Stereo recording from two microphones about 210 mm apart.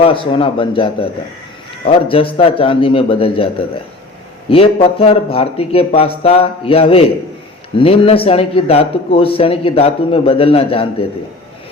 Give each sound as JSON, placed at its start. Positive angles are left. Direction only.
{"t": 0.0, "sound": "a man's voice", "side_deg": 25}